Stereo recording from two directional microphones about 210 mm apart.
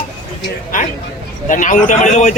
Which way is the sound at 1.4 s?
35° left (ahead or behind).